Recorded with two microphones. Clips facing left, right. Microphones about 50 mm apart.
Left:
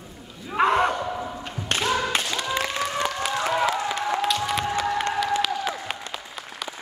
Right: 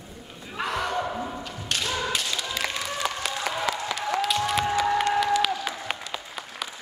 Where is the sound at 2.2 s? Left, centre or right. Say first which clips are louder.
Left 4 dB; left.